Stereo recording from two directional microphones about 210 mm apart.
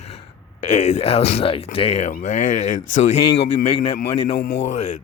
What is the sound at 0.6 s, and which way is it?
A man's voice, 35° left (ahead or behind).